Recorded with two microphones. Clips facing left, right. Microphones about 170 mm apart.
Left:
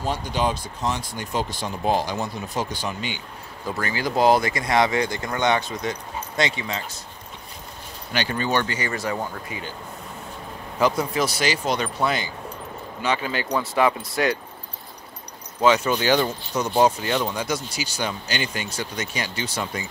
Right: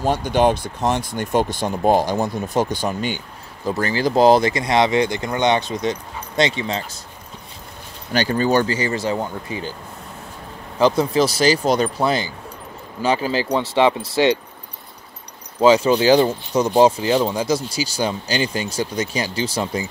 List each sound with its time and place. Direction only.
0.0 s speech: 50° right (ahead or behind)
3.7 s speech: 35° right (ahead or behind)
8.1 s speech: 40° right (ahead or behind)
10.8 s speech: 30° right (ahead or behind)
15.6 s speech: 30° right (ahead or behind)